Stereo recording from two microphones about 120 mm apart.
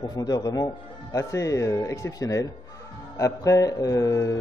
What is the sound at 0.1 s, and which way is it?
A man's voice, 35° left (ahead or behind).